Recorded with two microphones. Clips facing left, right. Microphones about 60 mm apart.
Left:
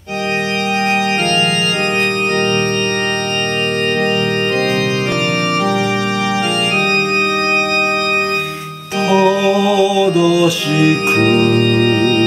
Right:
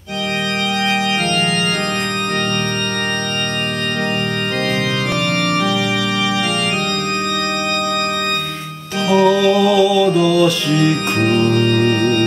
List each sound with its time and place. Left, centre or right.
9.1 s music: centre
11.1 s organ: left